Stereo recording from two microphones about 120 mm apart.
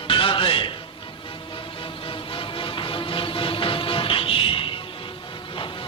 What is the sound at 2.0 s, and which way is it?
Music, 45° left (ahead or behind).